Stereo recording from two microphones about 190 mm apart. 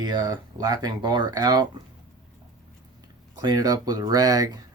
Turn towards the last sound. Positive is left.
turn(degrees=-20)  # may be behind; listen again after turning